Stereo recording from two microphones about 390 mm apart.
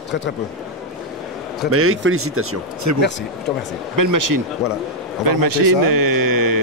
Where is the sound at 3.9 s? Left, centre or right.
Right.